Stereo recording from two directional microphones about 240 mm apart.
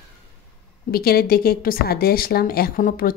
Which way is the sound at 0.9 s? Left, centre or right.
Left.